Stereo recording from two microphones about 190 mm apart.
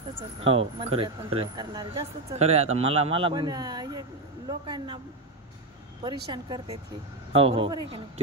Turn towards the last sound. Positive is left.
turn(degrees=-25)  # may be behind; listen again after turning